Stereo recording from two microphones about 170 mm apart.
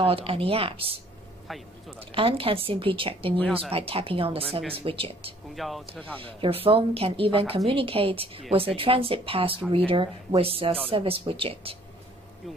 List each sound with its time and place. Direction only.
0.0 s a woman's voice: 35° right (ahead or behind)
1.5 s speech: centre (ahead or behind)
2.1 s a woman's voice: 35° right (ahead or behind)
5.6 s speech: centre (ahead or behind)
6.4 s a woman's voice: 35° right (ahead or behind)